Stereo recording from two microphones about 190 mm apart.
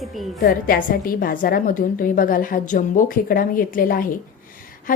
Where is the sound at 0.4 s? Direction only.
45° left (ahead or behind).